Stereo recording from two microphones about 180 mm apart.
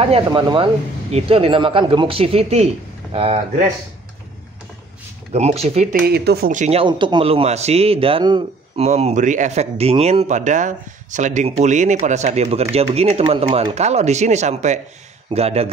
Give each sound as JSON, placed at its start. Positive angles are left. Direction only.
{"t": 0.0, "sound": "speech", "side_deg": -30}
{"t": 5.3, "sound": "speech", "side_deg": -35}
{"t": 5.9, "sound": "speech", "side_deg": -60}
{"t": 6.5, "sound": "speech", "side_deg": -40}
{"t": 8.8, "sound": "speech", "side_deg": -40}